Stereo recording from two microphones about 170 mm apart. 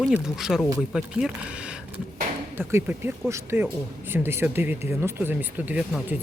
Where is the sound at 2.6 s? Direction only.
15° right (ahead or behind).